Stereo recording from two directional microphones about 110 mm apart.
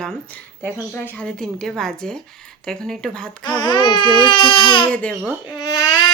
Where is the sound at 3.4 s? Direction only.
45° left (ahead or behind).